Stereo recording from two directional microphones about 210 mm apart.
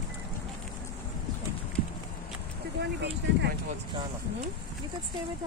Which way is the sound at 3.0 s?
55° right (ahead or behind).